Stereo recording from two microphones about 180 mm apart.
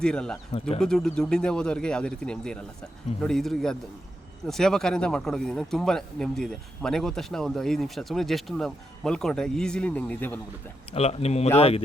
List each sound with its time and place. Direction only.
0.0 s speech: 5° left (ahead or behind)
10.9 s speech: 35° left (ahead or behind)